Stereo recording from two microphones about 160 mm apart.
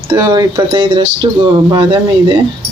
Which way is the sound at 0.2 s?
25° right (ahead or behind).